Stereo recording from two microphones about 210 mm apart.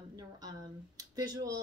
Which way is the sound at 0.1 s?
15° right (ahead or behind).